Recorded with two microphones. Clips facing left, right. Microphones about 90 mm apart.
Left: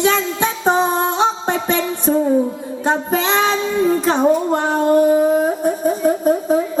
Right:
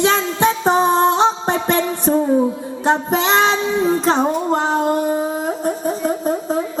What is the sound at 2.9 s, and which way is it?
Female singing, 20° right (ahead or behind).